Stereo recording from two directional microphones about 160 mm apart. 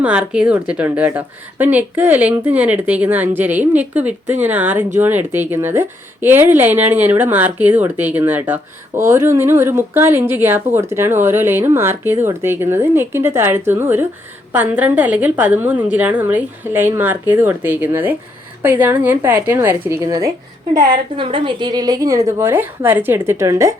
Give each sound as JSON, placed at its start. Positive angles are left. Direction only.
{"t": 0.0, "sound": "speech", "side_deg": -5}
{"t": 21.2, "sound": "a woman's voice", "side_deg": -30}